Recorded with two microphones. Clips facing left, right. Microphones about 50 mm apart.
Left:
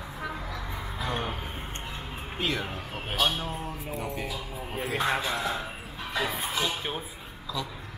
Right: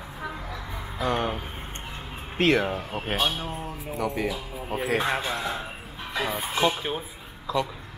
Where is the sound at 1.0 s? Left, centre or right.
Right.